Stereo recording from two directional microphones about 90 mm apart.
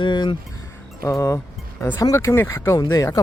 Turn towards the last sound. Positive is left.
turn(degrees=40)  # may be behind; listen again after turning